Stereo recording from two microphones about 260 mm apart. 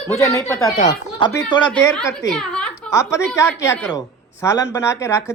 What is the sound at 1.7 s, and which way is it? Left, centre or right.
A woman's voice, centre.